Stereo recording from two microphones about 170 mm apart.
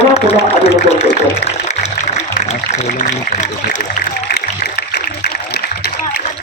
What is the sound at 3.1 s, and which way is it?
Speech, 45° left (ahead or behind).